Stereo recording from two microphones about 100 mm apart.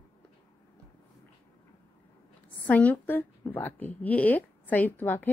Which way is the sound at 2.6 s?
15° left (ahead or behind).